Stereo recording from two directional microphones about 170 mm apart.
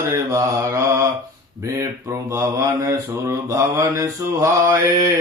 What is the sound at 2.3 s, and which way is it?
Mantra, 20° right (ahead or behind).